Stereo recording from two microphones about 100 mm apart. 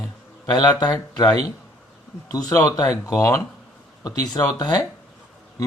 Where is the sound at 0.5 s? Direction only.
40° left (ahead or behind).